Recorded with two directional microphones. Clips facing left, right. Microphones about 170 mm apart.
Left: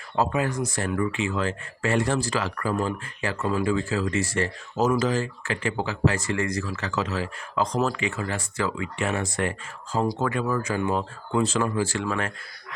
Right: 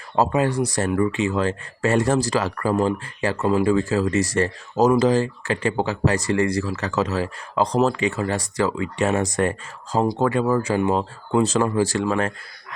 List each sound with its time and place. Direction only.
0.2 s speech: 35° right (ahead or behind)